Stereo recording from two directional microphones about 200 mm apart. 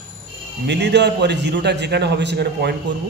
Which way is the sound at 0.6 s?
60° right (ahead or behind).